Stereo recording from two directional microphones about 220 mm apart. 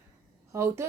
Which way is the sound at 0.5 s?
10° right (ahead or behind).